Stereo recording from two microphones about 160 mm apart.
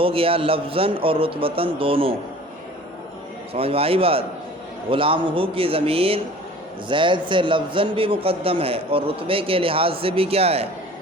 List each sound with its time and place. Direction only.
0.0 s a man's voice: 35° right (ahead or behind)
3.5 s a man's voice: 35° right (ahead or behind)